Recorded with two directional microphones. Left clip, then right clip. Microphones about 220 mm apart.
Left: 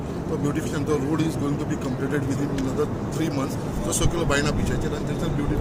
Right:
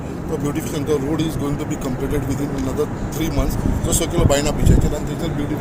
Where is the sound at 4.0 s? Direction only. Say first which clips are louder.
Right 5 dB; centre (ahead or behind).